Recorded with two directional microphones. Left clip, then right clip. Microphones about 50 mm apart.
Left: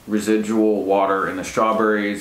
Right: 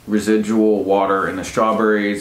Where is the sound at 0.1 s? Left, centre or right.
Right.